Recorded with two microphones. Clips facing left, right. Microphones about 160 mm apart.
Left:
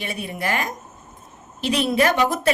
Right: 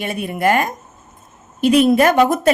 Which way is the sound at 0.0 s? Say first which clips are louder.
Right 8 dB; 50° right (ahead or behind).